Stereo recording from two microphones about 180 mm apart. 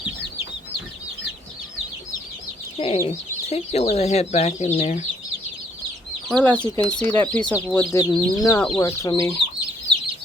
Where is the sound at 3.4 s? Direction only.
35° left (ahead or behind).